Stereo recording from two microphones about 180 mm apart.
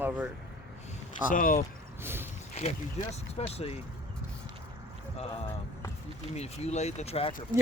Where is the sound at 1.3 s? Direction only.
50° left (ahead or behind).